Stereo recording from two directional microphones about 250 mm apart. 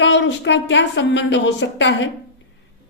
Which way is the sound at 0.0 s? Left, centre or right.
Left.